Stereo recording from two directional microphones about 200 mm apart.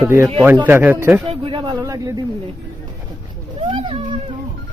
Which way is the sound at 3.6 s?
25° right (ahead or behind).